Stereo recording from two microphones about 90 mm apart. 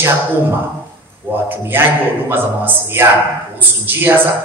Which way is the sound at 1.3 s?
25° right (ahead or behind).